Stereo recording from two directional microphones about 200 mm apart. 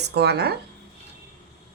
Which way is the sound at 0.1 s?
55° right (ahead or behind).